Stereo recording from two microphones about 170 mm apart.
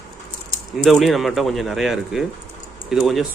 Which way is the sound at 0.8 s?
Centre (ahead or behind).